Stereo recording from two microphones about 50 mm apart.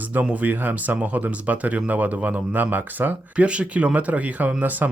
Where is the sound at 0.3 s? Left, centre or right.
Right.